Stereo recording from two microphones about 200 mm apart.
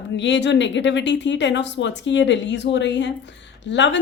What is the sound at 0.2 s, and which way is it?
A woman's voice, 60° left (ahead or behind).